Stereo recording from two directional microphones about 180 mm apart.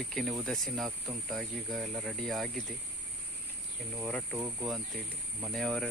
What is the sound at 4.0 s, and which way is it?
Speech, 5° left (ahead or behind).